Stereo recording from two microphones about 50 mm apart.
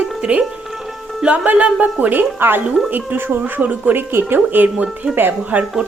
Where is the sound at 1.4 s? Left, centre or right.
Right.